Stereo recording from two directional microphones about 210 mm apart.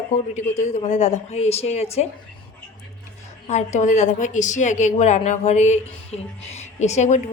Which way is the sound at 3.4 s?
35° left (ahead or behind).